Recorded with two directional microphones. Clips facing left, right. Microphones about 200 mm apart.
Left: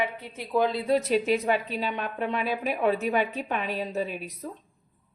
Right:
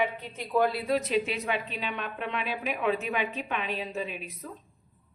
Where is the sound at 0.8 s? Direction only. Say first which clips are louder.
Left 4 dB; 35° left (ahead or behind).